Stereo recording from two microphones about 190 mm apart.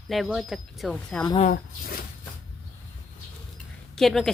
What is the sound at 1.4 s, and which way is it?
Speech, 50° left (ahead or behind).